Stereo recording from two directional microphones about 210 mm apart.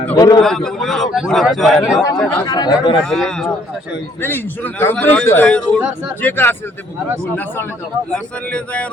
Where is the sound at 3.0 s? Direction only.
Centre (ahead or behind).